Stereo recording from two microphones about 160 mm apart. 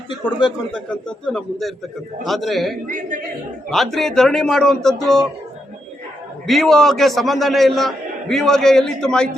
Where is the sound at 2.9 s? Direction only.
55° right (ahead or behind).